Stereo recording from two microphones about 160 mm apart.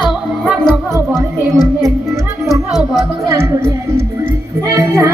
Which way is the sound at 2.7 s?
Centre (ahead or behind).